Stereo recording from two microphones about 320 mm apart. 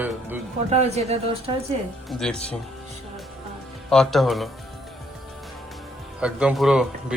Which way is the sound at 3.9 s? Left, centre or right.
Centre.